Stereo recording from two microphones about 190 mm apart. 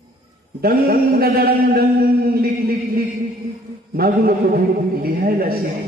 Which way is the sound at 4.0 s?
50° right (ahead or behind).